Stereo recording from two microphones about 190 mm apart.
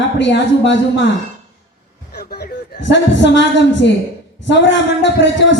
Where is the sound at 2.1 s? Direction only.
55° left (ahead or behind).